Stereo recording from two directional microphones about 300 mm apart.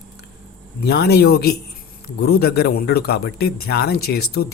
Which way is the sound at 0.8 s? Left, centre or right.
Left.